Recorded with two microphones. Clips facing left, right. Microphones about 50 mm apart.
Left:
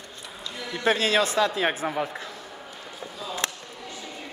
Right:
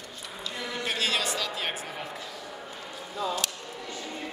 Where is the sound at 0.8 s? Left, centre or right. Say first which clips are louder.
Left 8 dB; left.